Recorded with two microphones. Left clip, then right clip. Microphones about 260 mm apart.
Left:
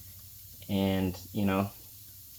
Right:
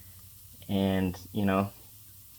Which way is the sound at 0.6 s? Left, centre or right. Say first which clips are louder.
Right 1 dB; right.